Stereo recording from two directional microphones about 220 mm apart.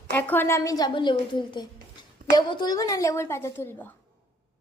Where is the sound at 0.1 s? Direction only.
10° left (ahead or behind).